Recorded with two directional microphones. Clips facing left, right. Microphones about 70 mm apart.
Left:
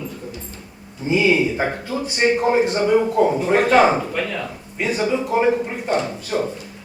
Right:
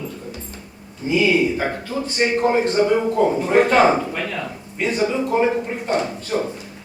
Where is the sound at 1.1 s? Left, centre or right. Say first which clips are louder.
Even; left.